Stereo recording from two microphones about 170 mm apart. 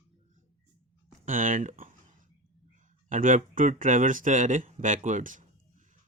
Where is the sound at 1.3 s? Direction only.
50° right (ahead or behind).